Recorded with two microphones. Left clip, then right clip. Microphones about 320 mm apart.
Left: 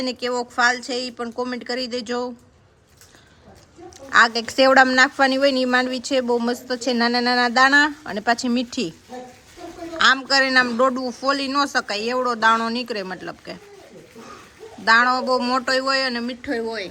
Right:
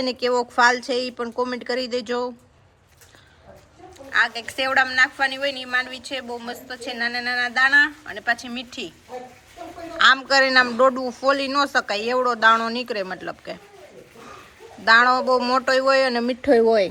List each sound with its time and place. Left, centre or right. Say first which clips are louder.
0.0 s speech: right 3 dB; centre
4.1 s speech: left 5 dB; centre
10.0 s a man's voice: right 1 dB; centre
14.8 s speech: right 1 dB; centre